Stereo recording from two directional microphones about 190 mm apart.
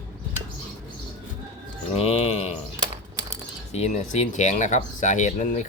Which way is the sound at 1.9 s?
35° left (ahead or behind).